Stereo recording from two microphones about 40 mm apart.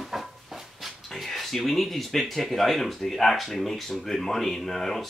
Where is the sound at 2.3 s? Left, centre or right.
Centre.